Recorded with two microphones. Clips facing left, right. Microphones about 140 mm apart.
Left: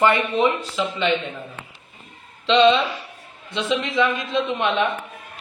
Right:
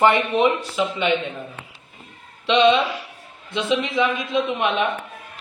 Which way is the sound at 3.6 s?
20° right (ahead or behind).